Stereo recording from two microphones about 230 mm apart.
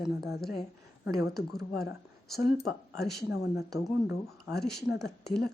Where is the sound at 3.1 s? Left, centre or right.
Left.